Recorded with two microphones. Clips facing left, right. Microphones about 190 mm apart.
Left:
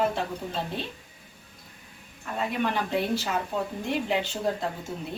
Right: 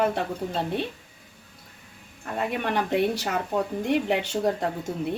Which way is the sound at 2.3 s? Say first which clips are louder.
Right 1 dB; 60° right (ahead or behind).